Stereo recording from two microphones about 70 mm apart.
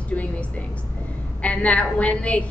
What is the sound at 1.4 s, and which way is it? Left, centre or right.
A woman's voice, centre.